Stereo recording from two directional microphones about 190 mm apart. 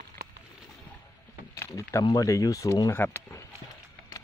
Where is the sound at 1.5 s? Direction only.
15° left (ahead or behind).